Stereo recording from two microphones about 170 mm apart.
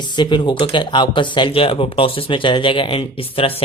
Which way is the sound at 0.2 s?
25° left (ahead or behind).